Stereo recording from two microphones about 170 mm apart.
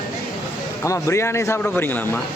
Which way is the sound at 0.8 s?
15° left (ahead or behind).